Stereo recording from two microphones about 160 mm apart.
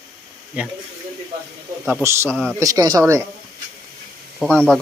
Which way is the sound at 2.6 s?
20° right (ahead or behind).